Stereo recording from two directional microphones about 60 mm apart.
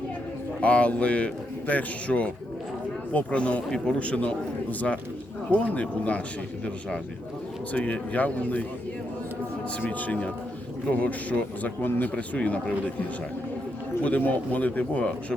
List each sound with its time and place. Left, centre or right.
0.6 s a man's voice: left
7.7 s a man's voice: left
9.8 s a man's voice: left
14.2 s a man's voice: left